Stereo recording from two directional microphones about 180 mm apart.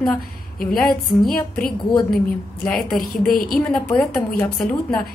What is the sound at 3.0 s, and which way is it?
Speech, 55° left (ahead or behind).